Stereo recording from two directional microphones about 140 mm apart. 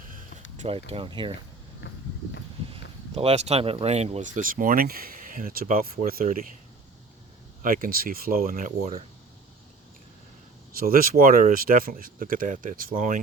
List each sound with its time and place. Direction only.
0.6 s speech: 45° right (ahead or behind)
2.7 s speech: 40° right (ahead or behind)
4.4 s speech: 80° right
7.6 s speech: 90° right; by 9.0 s 65° right (ahead or behind)
10.8 s speech: 90° right